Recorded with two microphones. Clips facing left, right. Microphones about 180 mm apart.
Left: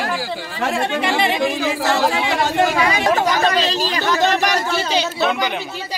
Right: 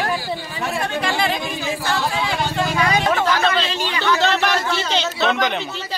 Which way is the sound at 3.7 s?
35° left (ahead or behind).